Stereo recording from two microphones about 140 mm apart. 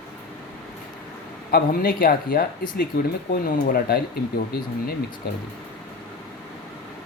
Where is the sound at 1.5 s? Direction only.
90° left.